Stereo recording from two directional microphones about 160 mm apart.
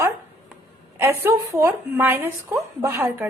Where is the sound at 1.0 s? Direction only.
15° right (ahead or behind).